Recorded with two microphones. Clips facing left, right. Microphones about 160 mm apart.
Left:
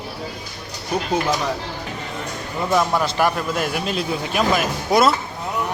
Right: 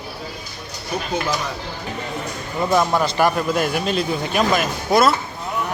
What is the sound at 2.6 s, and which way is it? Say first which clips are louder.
Speech: right 1 dB; centre (ahead or behind).